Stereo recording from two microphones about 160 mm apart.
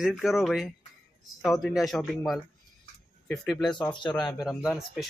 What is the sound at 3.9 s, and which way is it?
Speech, 30° left (ahead or behind).